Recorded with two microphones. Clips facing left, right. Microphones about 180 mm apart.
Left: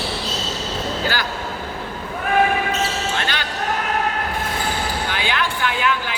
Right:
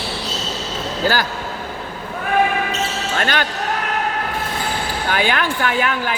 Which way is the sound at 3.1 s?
50° right (ahead or behind).